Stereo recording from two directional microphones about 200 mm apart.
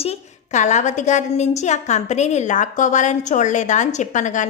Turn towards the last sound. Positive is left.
turn(degrees=40)  # may be behind; listen again after turning